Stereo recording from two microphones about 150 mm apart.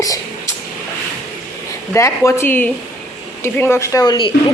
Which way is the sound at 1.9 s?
20° left (ahead or behind).